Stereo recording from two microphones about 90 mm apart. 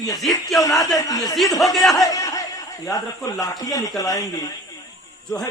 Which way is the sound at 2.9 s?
40° left (ahead or behind).